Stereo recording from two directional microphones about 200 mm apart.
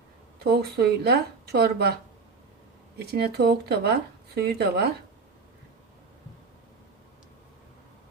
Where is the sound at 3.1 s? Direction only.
55° right (ahead or behind).